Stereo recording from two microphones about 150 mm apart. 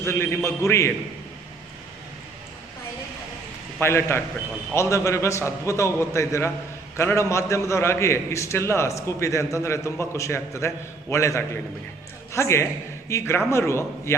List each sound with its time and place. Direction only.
0.0 s a man's voice: 15° left (ahead or behind)
3.8 s a man's voice: 15° left (ahead or behind)